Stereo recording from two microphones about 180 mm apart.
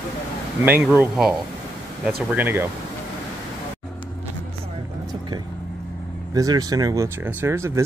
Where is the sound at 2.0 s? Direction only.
10° right (ahead or behind).